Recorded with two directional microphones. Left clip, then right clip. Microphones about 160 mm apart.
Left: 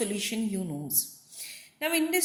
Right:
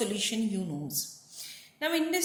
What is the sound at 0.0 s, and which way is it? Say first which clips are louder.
A woman's voice: right 1 dB; 40° left (ahead or behind).